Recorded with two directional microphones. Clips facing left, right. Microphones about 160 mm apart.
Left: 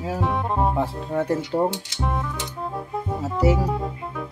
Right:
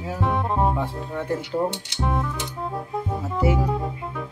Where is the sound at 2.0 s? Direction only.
Centre (ahead or behind).